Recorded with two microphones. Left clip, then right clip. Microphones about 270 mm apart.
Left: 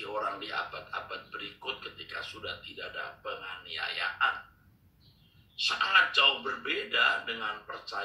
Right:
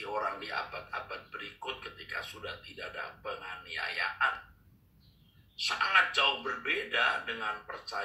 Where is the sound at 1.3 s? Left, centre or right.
Centre.